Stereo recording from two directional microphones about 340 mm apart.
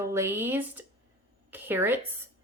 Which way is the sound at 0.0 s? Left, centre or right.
Centre.